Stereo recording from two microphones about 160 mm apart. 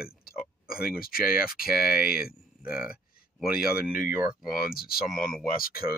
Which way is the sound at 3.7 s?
60° left (ahead or behind).